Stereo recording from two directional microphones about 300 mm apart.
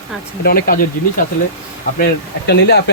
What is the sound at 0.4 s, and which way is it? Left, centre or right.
Speech, left.